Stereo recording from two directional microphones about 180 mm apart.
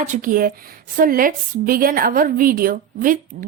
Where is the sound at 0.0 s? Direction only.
45° right (ahead or behind).